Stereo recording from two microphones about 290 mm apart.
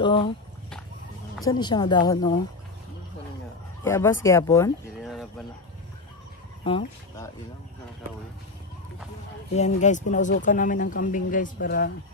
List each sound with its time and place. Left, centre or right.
0.0 s speech: centre
1.4 s speech: centre
3.8 s speech: centre
6.6 s speech: centre
9.6 s speech: left